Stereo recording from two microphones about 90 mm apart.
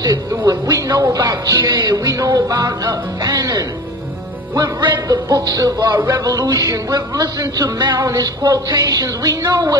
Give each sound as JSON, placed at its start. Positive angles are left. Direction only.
{"t": 0.3, "sound": "speech", "side_deg": -40}
{"t": 5.9, "sound": "speech", "side_deg": -35}